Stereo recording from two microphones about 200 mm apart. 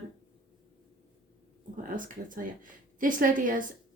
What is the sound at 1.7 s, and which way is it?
A woman's voice, 40° right (ahead or behind).